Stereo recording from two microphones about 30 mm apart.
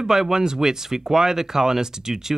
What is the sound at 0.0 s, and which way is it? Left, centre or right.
Speech, centre.